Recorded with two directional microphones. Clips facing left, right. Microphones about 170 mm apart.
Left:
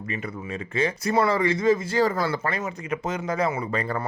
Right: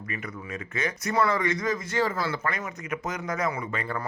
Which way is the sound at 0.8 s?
30° left (ahead or behind).